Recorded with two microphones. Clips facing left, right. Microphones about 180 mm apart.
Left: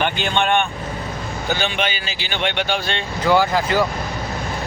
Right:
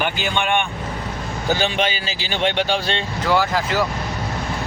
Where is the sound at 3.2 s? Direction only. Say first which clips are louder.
Left 3 dB; centre (ahead or behind).